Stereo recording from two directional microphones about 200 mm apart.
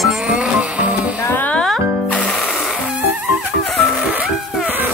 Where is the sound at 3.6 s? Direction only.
Centre (ahead or behind).